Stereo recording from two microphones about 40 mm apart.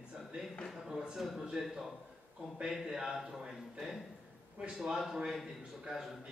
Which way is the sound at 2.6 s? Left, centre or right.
Centre.